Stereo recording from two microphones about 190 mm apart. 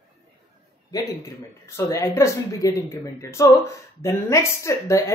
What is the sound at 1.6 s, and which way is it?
A woman's voice, 15° left (ahead or behind).